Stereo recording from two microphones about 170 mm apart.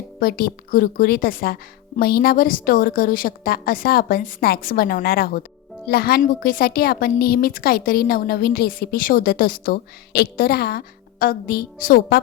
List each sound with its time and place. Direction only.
0.2 s a woman's voice: 60° left (ahead or behind)